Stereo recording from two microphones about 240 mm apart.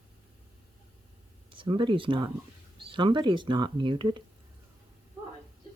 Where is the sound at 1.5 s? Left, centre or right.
Right.